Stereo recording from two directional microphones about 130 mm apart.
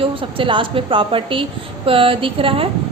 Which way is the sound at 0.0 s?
40° right (ahead or behind).